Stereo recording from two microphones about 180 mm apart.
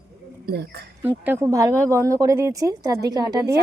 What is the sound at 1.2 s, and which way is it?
Speech, 15° right (ahead or behind).